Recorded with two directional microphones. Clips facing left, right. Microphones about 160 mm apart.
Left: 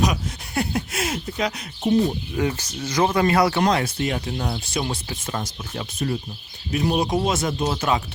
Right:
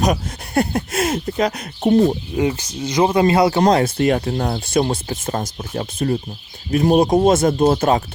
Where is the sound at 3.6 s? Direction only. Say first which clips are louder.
Right 6 dB; 40° right (ahead or behind).